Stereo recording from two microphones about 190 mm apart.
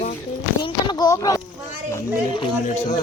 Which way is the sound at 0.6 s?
20° left (ahead or behind).